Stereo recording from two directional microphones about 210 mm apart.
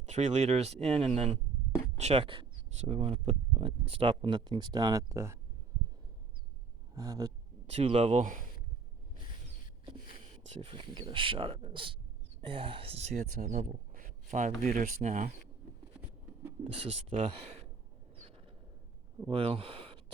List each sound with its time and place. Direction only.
0.0 s speech: 35° right (ahead or behind); by 5.4 s 15° right (ahead or behind)
6.9 s a sound: 15° right (ahead or behind)
7.7 s speech: 30° right (ahead or behind)
10.5 s speech: 25° right (ahead or behind)
13.9 s a sound: 35° right (ahead or behind)
14.6 s speech: 35° right (ahead or behind)
16.0 s writing: 10° right (ahead or behind)
16.7 s speech: 30° right (ahead or behind)
18.2 s a sound: 25° right (ahead or behind)
19.3 s speech: 25° right (ahead or behind)